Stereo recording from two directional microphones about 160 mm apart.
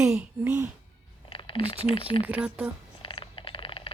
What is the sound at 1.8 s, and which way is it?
Speech, 35° left (ahead or behind).